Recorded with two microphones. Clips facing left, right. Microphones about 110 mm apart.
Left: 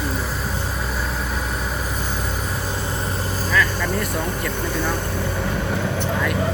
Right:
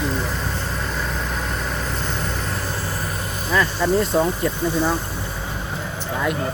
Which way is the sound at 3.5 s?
25° right (ahead or behind).